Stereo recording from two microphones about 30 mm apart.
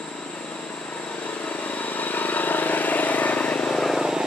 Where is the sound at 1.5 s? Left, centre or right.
Left.